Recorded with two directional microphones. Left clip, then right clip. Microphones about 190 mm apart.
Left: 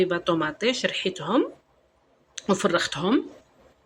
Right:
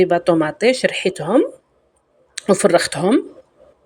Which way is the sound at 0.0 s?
30° right (ahead or behind).